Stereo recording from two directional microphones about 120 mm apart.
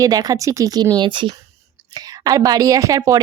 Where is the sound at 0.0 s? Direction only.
30° right (ahead or behind).